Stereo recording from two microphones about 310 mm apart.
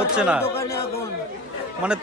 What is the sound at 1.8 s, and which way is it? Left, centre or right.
Speech, centre.